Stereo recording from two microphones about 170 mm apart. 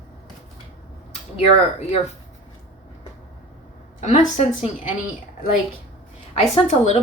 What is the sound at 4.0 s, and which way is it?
Speech, 45° left (ahead or behind).